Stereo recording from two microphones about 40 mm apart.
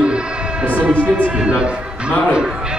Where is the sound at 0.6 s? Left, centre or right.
Right.